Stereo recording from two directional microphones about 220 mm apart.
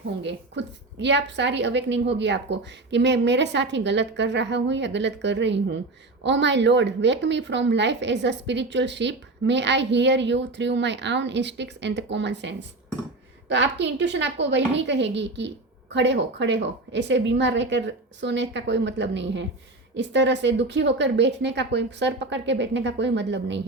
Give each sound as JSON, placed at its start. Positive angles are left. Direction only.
{"t": 0.2, "sound": "a woman's voice", "side_deg": -55}